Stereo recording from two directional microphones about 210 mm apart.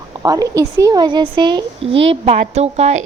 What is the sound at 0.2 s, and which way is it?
Speech, 15° right (ahead or behind).